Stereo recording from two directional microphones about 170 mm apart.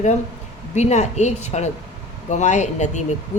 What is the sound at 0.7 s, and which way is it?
Speech, 40° left (ahead or behind).